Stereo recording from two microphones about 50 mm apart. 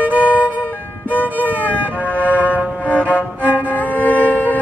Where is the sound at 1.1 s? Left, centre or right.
Left.